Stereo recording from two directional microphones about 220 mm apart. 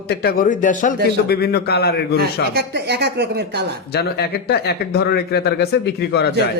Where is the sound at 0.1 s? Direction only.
45° left (ahead or behind).